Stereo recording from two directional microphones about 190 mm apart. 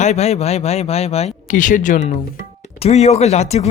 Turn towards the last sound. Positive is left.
turn(degrees=35)  # may be behind; listen again after turning